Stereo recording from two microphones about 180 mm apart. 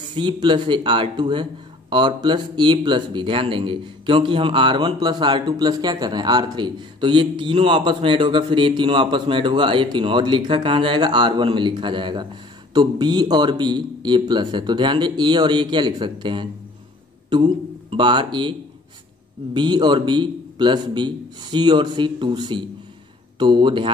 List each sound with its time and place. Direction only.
0.1 s speech: 25° right (ahead or behind)
17.8 s speech: 25° right (ahead or behind)
19.5 s speech: 25° right (ahead or behind)